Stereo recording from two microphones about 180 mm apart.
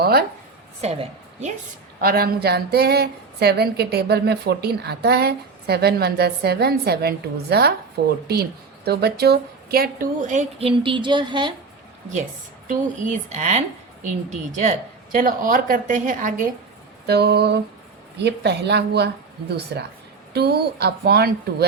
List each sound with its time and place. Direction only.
0.0 s a sound: 60° right (ahead or behind)
0.8 s a woman's voice: 35° right (ahead or behind)
2.0 s a woman's voice: 55° right (ahead or behind); by 11.5 s 25° right (ahead or behind)
12.6 s a woman's voice: 40° right (ahead or behind)
17.1 s a woman's voice: 65° right (ahead or behind)